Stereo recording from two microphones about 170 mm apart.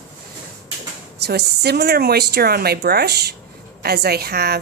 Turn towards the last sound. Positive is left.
turn(degrees=-70)  # may be behind; listen again after turning